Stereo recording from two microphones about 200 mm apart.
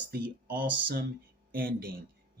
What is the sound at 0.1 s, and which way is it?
Speech, 45° right (ahead or behind).